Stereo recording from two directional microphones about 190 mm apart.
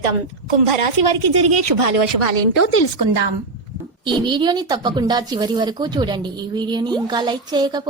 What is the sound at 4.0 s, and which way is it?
A woman's voice, 25° right (ahead or behind).